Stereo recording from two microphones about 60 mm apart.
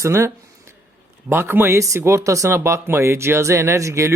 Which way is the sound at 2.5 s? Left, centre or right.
Right.